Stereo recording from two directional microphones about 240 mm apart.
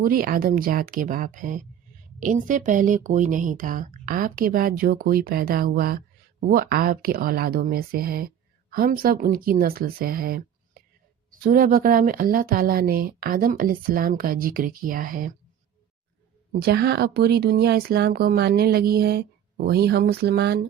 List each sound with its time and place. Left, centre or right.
0.0 s speech: right
16.5 s speech: right